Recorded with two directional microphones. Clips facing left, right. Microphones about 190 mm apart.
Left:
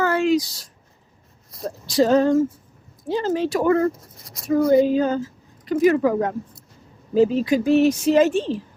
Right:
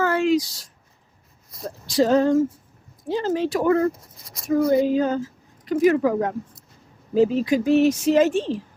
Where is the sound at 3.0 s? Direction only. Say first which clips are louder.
Left 1 dB; 40° left (ahead or behind).